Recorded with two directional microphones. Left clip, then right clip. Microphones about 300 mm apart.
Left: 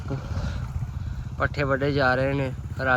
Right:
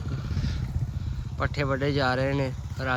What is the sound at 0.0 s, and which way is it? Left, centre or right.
Vehicle, left.